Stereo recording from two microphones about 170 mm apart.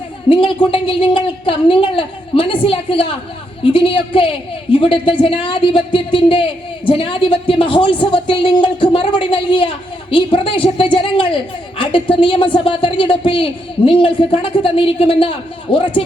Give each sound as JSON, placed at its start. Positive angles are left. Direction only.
{"t": 0.3, "sound": "a woman's voice", "side_deg": 30}